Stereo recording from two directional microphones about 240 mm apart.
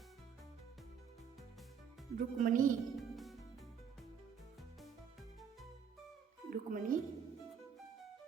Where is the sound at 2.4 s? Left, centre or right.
Right.